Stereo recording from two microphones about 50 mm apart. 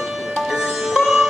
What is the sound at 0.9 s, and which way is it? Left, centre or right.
Sitar, centre.